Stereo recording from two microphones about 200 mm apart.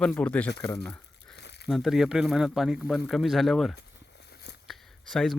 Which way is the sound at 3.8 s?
55° left (ahead or behind).